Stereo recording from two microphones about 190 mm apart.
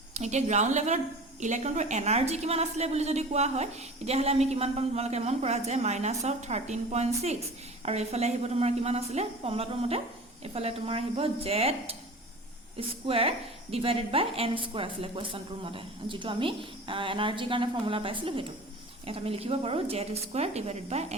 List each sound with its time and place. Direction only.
0.1 s a woman's voice: 35° right (ahead or behind)
13.1 s a woman's voice: 30° right (ahead or behind)